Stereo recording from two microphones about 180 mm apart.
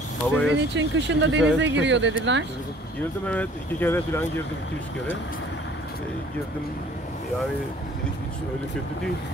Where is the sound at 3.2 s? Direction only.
10° left (ahead or behind).